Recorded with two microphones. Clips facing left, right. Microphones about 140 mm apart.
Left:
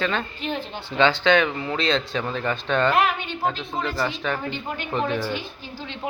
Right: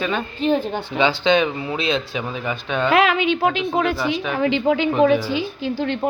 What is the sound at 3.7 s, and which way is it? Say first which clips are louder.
Speech: right 8 dB; 60° right (ahead or behind).